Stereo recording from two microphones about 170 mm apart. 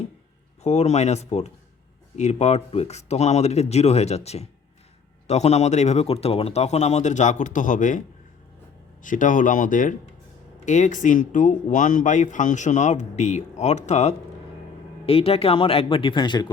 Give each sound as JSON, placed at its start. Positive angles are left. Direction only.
{"t": 0.6, "sound": "speech", "side_deg": 40}
{"t": 9.0, "sound": "speech", "side_deg": 50}